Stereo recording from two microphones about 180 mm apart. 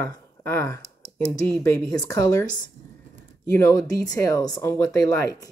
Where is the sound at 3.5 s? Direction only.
15° left (ahead or behind).